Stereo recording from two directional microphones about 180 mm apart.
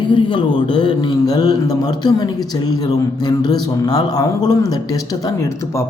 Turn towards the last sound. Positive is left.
turn(degrees=20)  # may be behind; listen again after turning